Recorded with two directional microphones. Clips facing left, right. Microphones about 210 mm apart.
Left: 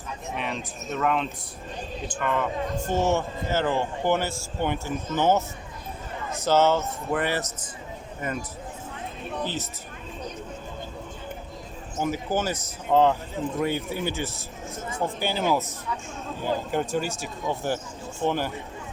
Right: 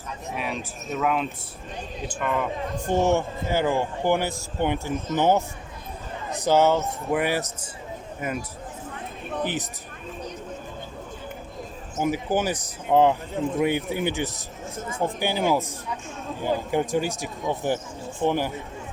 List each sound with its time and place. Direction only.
0.3 s speech: 5° right (ahead or behind)
2.8 s speech: 15° right (ahead or behind)
11.9 s speech: 15° right (ahead or behind)